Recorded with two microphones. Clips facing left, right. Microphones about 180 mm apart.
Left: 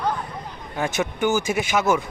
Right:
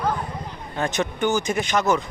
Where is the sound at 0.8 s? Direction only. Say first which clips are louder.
Even; 5° left (ahead or behind).